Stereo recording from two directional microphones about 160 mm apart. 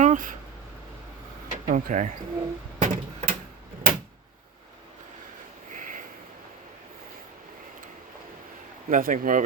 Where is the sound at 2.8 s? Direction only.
40° right (ahead or behind).